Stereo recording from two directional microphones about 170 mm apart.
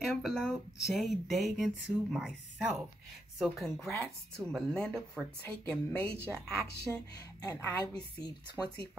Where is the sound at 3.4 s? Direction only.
5° left (ahead or behind).